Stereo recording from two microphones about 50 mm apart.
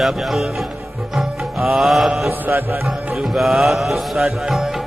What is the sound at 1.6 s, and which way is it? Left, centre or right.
Music, centre.